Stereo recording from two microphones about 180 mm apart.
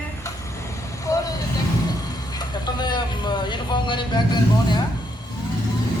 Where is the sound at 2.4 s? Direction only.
25° left (ahead or behind).